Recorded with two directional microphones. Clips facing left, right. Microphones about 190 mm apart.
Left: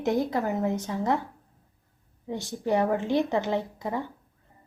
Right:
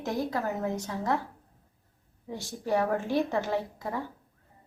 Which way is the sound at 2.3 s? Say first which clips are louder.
Left 3 dB; 20° left (ahead or behind).